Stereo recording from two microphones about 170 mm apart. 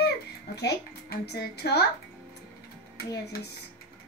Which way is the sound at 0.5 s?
75° left (ahead or behind).